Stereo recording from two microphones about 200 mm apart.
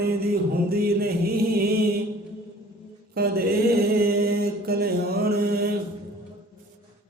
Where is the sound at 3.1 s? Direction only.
50° right (ahead or behind).